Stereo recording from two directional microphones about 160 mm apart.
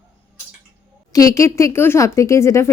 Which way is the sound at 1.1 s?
20° left (ahead or behind).